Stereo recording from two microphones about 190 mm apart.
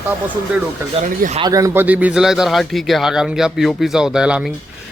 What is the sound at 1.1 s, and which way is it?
Speech, 45° right (ahead or behind).